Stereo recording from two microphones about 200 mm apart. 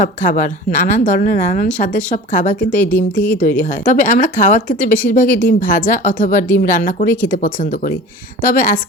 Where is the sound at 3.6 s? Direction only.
40° left (ahead or behind).